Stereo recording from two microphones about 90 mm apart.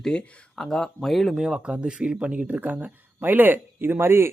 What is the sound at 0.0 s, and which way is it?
Speech, 10° left (ahead or behind).